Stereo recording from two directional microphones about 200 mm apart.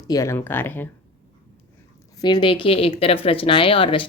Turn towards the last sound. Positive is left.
turn(degrees=25)  # may be behind; listen again after turning